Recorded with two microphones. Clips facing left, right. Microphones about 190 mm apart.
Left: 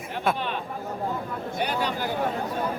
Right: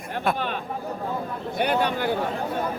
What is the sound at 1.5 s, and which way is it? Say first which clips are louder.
Speech: right 5 dB; 55° right (ahead or behind).